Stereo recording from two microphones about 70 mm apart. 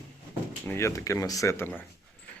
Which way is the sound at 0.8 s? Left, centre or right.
Left.